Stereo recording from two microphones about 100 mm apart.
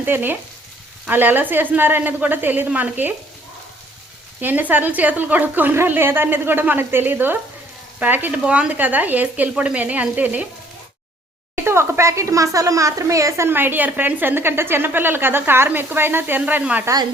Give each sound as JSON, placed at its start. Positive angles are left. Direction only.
{"t": 0.0, "sound": "speech", "side_deg": -20}
{"t": 4.4, "sound": "speech", "side_deg": -15}
{"t": 11.5, "sound": "speech", "side_deg": -25}